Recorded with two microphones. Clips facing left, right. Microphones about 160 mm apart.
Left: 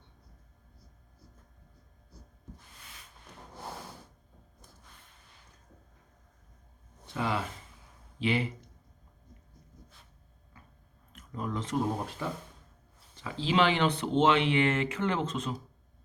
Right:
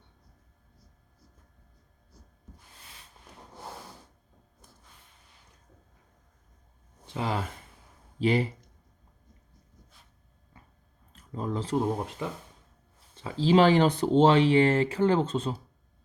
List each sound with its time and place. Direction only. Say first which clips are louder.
7.1 s speech: right 1 dB; 30° right (ahead or behind)
10.5 s biting: right 1 dB; 30° right (ahead or behind)
11.1 s speech: right 3 dB; 30° right (ahead or behind)
12.2 s speech: right 1 dB; 20° right (ahead or behind)
13.3 s speech: right 6 dB; 40° right (ahead or behind)